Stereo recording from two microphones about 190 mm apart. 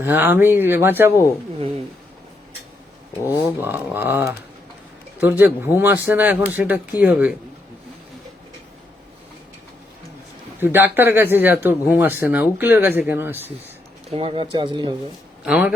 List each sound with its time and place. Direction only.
0.0 s speech: 10° right (ahead or behind)
3.4 s speech: 10° right (ahead or behind)
10.6 s speech: 10° right (ahead or behind)
14.1 s speech: 30° right (ahead or behind)
15.4 s speech: 5° right (ahead or behind)